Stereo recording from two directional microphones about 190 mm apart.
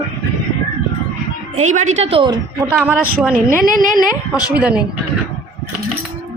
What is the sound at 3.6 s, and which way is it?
Speech, 45° right (ahead or behind).